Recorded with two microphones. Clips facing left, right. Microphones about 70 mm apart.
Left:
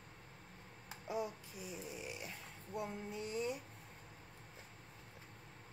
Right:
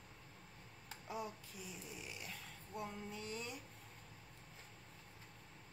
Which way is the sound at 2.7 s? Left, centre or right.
Centre.